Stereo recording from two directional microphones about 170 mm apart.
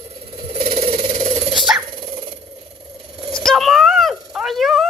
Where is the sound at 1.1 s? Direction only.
40° right (ahead or behind).